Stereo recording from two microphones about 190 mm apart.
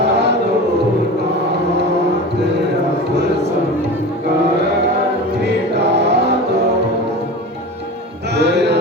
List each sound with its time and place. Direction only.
0.0 s chant: 60° right (ahead or behind)
5.4 s music: 60° right (ahead or behind)
8.4 s music: 60° right (ahead or behind)